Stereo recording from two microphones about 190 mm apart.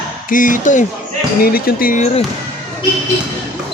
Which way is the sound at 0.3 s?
45° left (ahead or behind).